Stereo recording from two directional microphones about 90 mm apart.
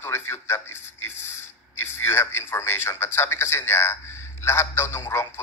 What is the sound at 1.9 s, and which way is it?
A man's voice, 30° left (ahead or behind).